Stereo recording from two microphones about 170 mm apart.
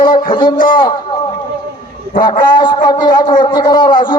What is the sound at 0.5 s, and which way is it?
Speech, 55° left (ahead or behind).